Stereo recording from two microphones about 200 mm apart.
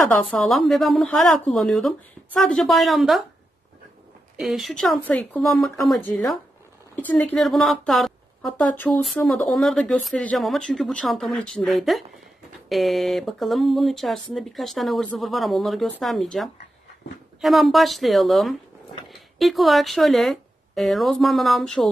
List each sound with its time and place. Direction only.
0.2 s a woman's voice: 5° left (ahead or behind)
4.4 s a woman's voice: centre (ahead or behind)